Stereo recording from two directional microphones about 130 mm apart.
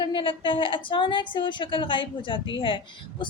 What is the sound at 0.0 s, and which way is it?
A woman's voice, 40° left (ahead or behind).